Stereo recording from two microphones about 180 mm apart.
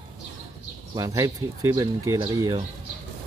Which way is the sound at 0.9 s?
20° right (ahead or behind).